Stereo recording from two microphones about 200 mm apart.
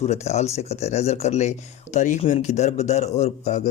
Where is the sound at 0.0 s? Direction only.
35° left (ahead or behind).